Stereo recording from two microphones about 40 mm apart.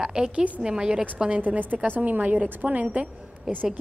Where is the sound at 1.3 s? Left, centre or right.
Right.